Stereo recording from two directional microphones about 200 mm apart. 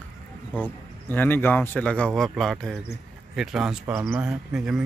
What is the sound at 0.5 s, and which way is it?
Speech, 10° left (ahead or behind).